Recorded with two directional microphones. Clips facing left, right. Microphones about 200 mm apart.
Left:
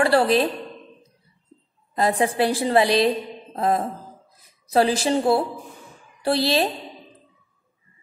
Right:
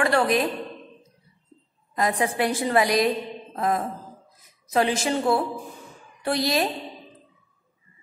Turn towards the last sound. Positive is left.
turn(degrees=30)  # may be behind; listen again after turning